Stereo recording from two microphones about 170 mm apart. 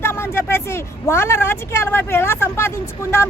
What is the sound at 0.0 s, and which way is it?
Speech, 15° left (ahead or behind).